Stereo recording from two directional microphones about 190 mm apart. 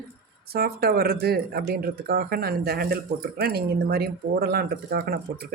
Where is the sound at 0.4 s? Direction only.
55° right (ahead or behind).